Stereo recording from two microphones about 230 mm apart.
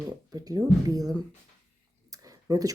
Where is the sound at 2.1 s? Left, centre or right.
Centre.